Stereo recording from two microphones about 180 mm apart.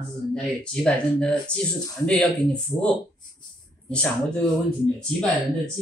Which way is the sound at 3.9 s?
5° left (ahead or behind).